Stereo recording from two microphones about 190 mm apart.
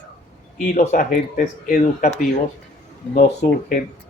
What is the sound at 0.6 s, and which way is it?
Speech, 40° left (ahead or behind).